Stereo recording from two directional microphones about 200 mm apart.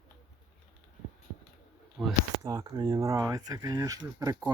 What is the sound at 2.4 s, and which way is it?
Speech, 20° right (ahead or behind).